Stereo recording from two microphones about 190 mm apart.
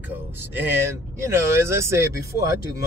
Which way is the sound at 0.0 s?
10° right (ahead or behind).